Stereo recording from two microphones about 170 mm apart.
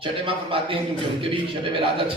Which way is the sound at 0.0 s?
30° right (ahead or behind).